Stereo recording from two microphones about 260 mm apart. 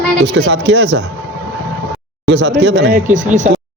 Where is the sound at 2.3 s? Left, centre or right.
Right.